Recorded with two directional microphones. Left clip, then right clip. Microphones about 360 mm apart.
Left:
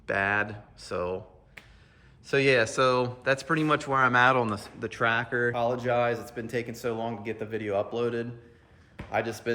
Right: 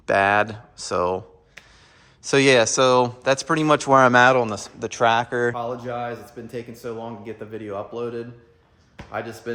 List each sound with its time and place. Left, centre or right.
0.0 s speech: centre
2.2 s speech: centre